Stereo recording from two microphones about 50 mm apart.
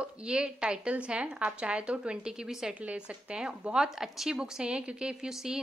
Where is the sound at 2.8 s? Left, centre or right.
Right.